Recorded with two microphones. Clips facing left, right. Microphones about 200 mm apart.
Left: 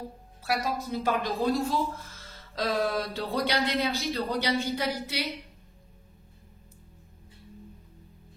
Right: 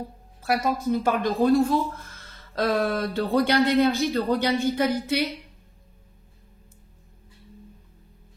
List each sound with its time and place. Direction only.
0.5 s speech: 50° right (ahead or behind)